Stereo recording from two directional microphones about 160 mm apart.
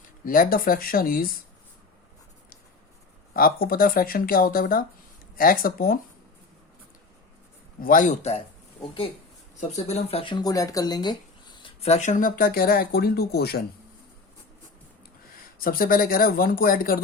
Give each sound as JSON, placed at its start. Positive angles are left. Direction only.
{"t": 0.3, "sound": "speech", "side_deg": 60}
{"t": 3.3, "sound": "speech", "side_deg": 65}
{"t": 7.8, "sound": "speech", "side_deg": 55}
{"t": 11.8, "sound": "speech", "side_deg": 45}
{"t": 15.5, "sound": "speech", "side_deg": 65}